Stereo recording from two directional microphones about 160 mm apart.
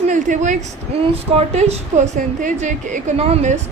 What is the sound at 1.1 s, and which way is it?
A woman's voice, 40° right (ahead or behind).